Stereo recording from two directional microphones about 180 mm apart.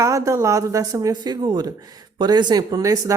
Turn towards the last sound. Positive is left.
turn(degrees=-20)  # may be behind; listen again after turning